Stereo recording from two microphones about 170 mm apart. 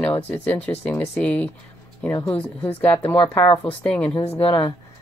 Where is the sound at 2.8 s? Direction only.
10° left (ahead or behind).